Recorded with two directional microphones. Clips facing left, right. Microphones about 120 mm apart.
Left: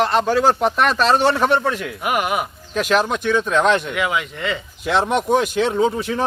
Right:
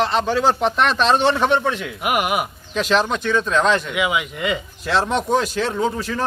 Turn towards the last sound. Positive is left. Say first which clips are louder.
# left 3 dB
turn(degrees=20)  # may be behind; listen again after turning